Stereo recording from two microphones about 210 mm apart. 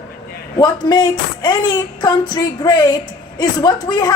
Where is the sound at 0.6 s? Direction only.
20° left (ahead or behind).